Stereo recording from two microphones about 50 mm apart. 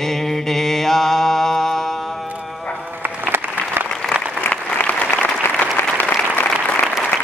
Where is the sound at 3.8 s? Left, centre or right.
Right.